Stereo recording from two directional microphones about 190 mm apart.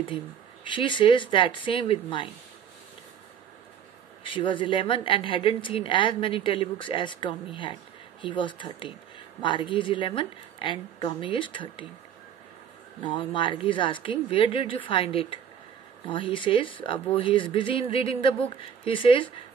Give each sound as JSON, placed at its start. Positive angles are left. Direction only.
{"t": 0.7, "sound": "a woman's voice", "side_deg": 25}
{"t": 4.2, "sound": "a woman's voice", "side_deg": 25}
{"t": 13.0, "sound": "a woman's voice", "side_deg": 25}